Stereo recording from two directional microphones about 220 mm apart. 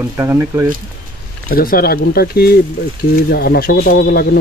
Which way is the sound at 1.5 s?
40° left (ahead or behind).